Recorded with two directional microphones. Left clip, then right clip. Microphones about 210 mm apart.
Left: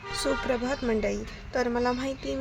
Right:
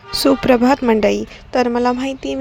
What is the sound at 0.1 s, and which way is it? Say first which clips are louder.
A woman's voice: right 14 dB; 40° right (ahead or behind).